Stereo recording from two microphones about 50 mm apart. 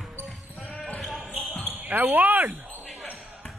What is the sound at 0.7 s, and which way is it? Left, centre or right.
Basketball bounce, centre.